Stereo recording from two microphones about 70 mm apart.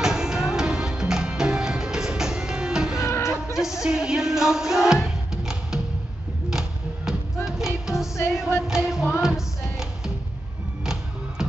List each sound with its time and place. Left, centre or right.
0.0 s music: centre
3.0 s music: left
3.5 s music: centre
7.1 s music: centre
10.8 s music: centre